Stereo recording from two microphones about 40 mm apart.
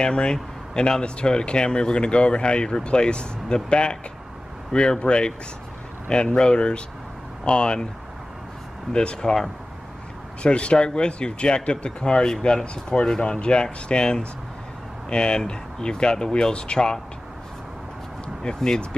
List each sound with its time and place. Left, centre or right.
0.0 s speech: left
8.9 s speech: left
10.4 s speech: left
18.4 s speech: centre